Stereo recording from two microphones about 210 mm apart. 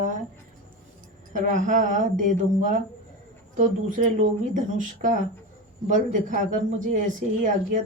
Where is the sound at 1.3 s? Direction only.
35° right (ahead or behind).